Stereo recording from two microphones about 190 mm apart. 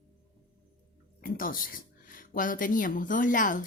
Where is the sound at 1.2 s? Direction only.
45° left (ahead or behind).